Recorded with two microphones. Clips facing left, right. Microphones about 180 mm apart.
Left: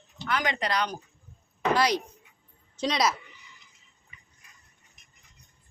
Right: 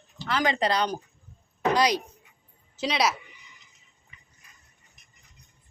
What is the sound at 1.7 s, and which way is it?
Speech, 15° right (ahead or behind).